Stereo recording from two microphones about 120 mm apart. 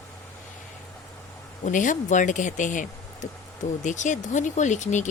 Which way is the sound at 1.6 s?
90° left.